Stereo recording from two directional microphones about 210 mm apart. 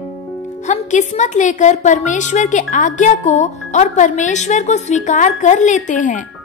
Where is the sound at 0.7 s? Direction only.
35° left (ahead or behind).